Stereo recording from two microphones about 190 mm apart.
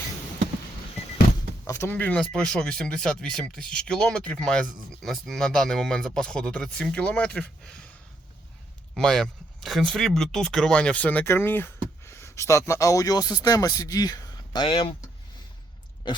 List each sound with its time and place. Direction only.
1.6 s speech: 15° left (ahead or behind)
9.0 s speech: 5° left (ahead or behind); by 15.1 s 25° left (ahead or behind)